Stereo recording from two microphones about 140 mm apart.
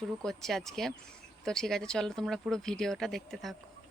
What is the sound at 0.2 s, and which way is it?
Speech, 5° left (ahead or behind).